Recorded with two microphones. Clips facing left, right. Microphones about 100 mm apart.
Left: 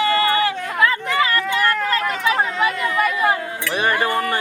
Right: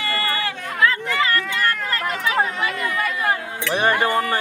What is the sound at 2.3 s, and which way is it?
Chatter, 15° left (ahead or behind).